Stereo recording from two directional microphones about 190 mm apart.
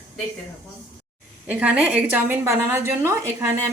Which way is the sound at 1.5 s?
5° right (ahead or behind).